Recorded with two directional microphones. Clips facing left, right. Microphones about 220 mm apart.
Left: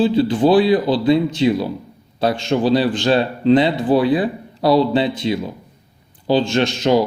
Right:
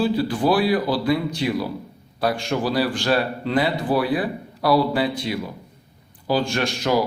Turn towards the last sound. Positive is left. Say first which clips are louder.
# left 6 dB
turn(degrees=25)  # may be behind; listen again after turning